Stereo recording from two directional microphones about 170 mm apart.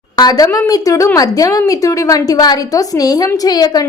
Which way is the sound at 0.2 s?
20° left (ahead or behind).